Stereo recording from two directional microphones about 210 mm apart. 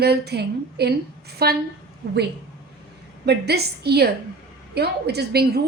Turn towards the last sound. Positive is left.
turn(degrees=-50)  # may be behind; listen again after turning